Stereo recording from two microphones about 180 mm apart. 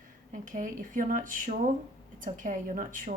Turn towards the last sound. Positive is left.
turn(degrees=-45)  # may be behind; listen again after turning